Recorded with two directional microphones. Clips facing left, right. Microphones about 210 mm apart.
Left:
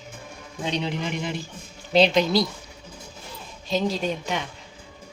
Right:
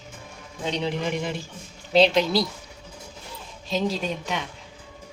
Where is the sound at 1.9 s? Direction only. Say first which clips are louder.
Even; centre (ahead or behind).